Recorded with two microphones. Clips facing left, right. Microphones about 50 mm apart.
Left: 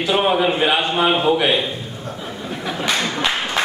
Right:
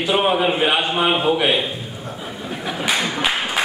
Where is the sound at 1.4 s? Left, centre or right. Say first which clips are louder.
Left 1 dB; centre.